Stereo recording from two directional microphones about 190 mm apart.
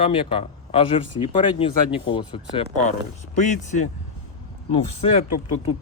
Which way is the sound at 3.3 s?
40° left (ahead or behind).